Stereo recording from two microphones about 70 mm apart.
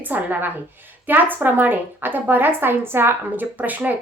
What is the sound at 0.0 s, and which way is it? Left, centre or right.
A woman's voice, right.